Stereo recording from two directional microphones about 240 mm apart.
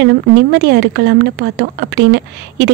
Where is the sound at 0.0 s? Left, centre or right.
Right.